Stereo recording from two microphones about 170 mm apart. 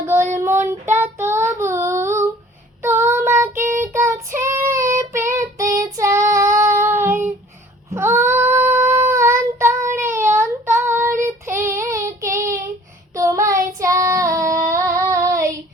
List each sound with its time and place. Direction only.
0.3 s child singing: 15° right (ahead or behind)
14.7 s female singing: 15° right (ahead or behind)